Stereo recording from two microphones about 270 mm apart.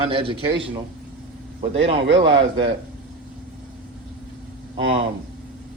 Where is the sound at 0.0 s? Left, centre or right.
Centre.